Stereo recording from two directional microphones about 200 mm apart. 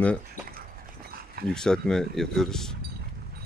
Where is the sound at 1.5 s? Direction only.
5° left (ahead or behind).